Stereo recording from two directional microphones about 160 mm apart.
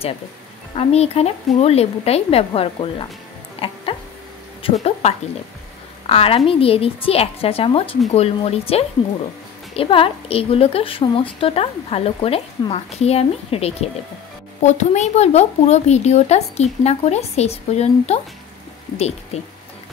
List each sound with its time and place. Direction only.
0.7 s a woman's voice: 40° left (ahead or behind)
3.5 s music: 35° left (ahead or behind)
6.0 s a woman's voice: 35° left (ahead or behind)
19.3 s a woman's voice: 40° left (ahead or behind)